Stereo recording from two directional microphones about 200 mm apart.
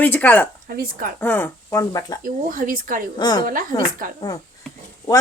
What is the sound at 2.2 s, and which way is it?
Speech, 45° right (ahead or behind).